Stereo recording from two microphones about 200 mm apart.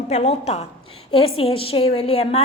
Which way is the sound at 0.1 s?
30° left (ahead or behind).